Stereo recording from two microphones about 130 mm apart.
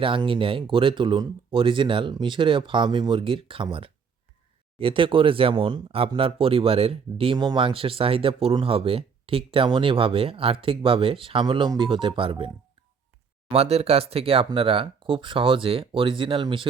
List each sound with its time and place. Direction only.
0.0 s speech: 40° right (ahead or behind)
13.5 s speech: 50° right (ahead or behind)